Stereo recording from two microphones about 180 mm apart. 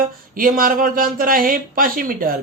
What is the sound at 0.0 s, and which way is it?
Speech, 50° right (ahead or behind).